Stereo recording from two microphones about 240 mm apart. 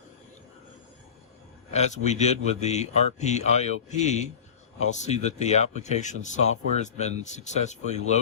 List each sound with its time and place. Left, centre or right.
1.7 s speech: left